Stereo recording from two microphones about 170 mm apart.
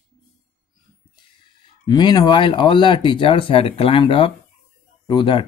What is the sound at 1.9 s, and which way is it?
Speech, 25° left (ahead or behind).